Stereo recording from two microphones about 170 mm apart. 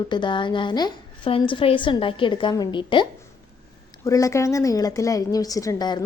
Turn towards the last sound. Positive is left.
turn(degrees=25)  # may be behind; listen again after turning